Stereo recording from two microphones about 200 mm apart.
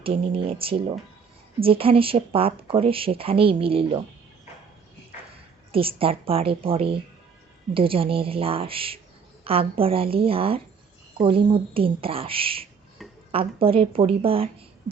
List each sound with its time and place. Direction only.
0.0 s speech: 25° right (ahead or behind)
5.7 s speech: 30° right (ahead or behind)
13.0 s a sound: centre (ahead or behind)
13.3 s speech: 30° right (ahead or behind)